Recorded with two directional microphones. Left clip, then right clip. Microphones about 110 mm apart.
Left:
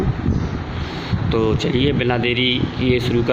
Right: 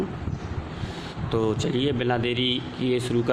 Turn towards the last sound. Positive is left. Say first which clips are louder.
# left 6 dB
turn(degrees=-20)  # may be behind; listen again after turning